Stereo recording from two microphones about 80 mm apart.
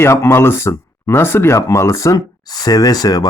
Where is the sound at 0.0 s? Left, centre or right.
Left.